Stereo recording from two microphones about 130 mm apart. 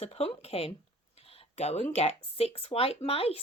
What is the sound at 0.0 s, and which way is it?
Speech, 50° left (ahead or behind).